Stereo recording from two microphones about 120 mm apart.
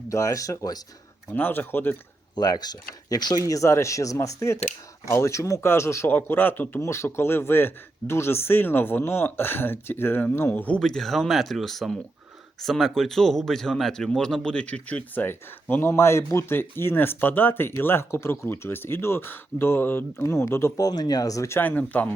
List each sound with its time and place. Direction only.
0.1 s speech: 25° left (ahead or behind)
1.3 s speech: 15° left (ahead or behind)
2.3 s speech: 35° left (ahead or behind); by 22.1 s 15° left (ahead or behind)